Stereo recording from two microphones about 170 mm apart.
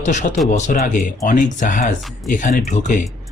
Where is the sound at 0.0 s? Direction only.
45° left (ahead or behind).